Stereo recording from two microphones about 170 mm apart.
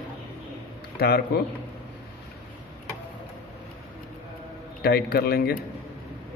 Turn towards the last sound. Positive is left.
turn(degrees=65)  # may be behind; listen again after turning